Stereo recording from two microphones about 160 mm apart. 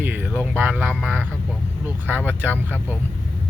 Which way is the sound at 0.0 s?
10° right (ahead or behind).